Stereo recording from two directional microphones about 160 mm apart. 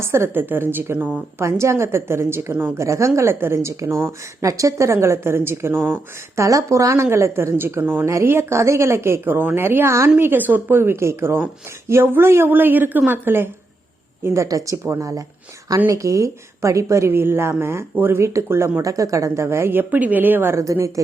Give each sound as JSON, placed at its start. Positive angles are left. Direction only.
{"t": 0.0, "sound": "a woman's voice", "side_deg": -15}